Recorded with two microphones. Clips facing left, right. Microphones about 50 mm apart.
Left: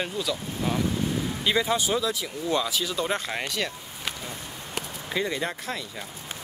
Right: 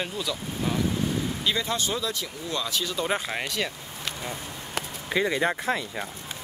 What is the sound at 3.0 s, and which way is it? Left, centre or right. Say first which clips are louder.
Speech: right 1 dB; centre.